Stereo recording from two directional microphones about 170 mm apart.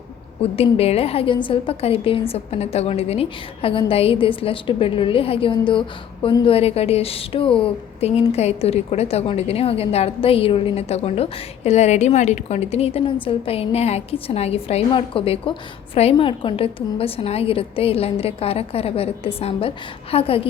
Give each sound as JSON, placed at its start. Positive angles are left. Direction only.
{"t": 0.4, "sound": "a woman's voice", "side_deg": 35}